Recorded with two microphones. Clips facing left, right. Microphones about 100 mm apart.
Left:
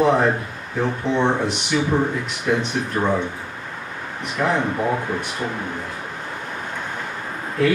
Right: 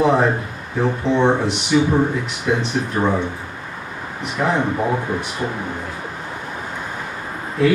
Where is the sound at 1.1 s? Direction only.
5° right (ahead or behind).